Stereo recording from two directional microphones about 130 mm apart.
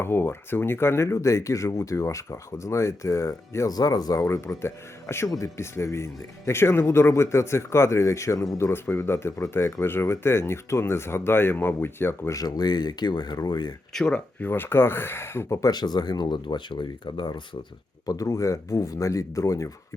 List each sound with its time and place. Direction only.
0.0 s speech: 15° left (ahead or behind)
13.9 s speech: 5° left (ahead or behind)
14.4 s speech: 15° left (ahead or behind)